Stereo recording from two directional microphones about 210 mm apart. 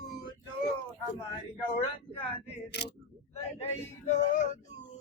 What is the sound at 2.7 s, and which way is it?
Speech, 50° left (ahead or behind).